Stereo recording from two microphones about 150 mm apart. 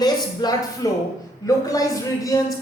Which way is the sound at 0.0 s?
25° left (ahead or behind).